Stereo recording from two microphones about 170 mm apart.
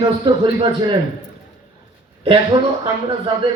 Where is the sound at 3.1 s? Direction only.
30° right (ahead or behind).